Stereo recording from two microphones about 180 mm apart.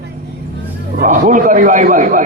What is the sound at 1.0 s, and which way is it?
A man's voice, 45° right (ahead or behind).